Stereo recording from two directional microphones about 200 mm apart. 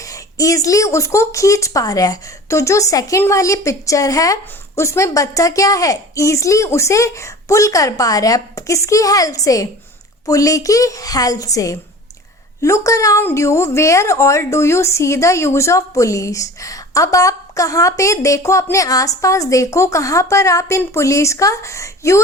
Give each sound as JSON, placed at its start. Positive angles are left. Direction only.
{"t": 0.0, "sound": "speech", "side_deg": 15}